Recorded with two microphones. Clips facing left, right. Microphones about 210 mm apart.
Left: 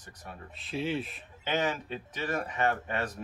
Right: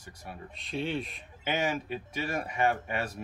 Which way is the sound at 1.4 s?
10° right (ahead or behind).